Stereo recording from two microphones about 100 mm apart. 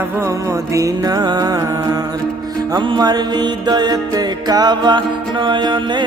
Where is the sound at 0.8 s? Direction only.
40° right (ahead or behind).